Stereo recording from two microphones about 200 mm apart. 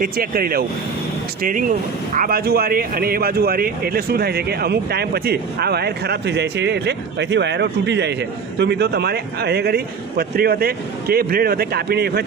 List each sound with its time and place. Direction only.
0.0 s speech: 45° right (ahead or behind)